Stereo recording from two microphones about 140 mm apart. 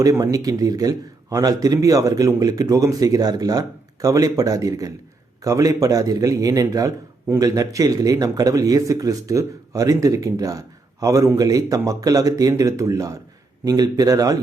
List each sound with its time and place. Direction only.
0.0 s speech: 25° right (ahead or behind)